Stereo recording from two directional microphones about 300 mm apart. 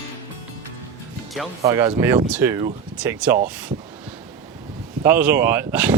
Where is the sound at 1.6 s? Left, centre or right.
Centre.